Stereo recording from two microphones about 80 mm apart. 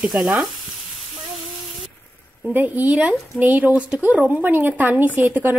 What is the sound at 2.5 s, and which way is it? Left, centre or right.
Speech, right.